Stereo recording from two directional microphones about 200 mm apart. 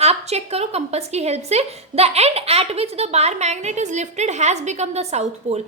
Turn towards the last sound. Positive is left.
turn(degrees=-35)  # may be behind; listen again after turning